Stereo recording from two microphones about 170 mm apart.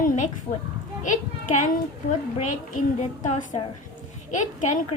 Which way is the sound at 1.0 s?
45° left (ahead or behind).